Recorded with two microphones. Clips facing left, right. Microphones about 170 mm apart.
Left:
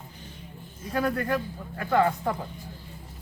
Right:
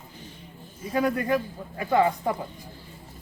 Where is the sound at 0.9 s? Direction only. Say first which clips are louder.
Right 2 dB; 15° right (ahead or behind).